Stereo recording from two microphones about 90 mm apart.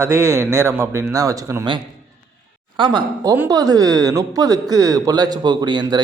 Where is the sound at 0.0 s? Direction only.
30° right (ahead or behind).